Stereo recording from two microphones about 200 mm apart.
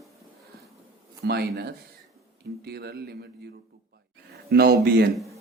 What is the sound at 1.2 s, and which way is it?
Speech, 55° right (ahead or behind).